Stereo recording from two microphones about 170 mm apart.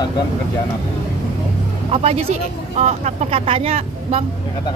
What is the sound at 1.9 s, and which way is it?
Speech, 35° right (ahead or behind).